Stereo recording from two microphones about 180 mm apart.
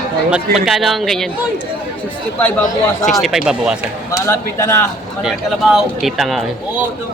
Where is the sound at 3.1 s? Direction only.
Centre (ahead or behind).